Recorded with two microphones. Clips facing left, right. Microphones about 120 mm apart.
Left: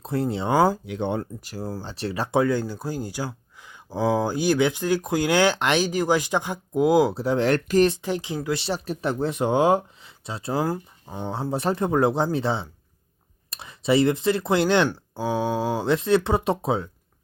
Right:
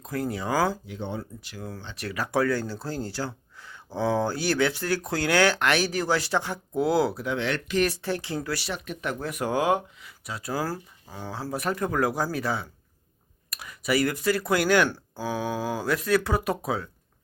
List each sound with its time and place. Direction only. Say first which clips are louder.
0.0 s speech: left 4 dB; 30° left (ahead or behind)
0.9 s speech: left 7 dB; 65° left (ahead or behind)
1.5 s speech: left 6 dB; 35° left (ahead or behind); by 7.2 s 15° left (ahead or behind)
7.2 s speech: left 7 dB; 35° left (ahead or behind)
7.9 s speech: left 4 dB; 15° left (ahead or behind)